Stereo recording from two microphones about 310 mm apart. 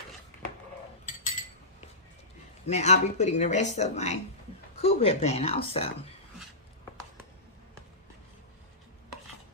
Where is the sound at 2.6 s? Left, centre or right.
Left.